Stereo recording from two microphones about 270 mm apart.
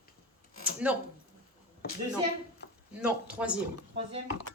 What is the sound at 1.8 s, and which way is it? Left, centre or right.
Speech, left.